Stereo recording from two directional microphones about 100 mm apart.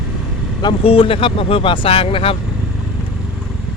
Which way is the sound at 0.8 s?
65° left (ahead or behind).